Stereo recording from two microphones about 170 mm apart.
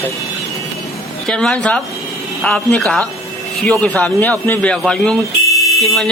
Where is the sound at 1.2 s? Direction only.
5° left (ahead or behind).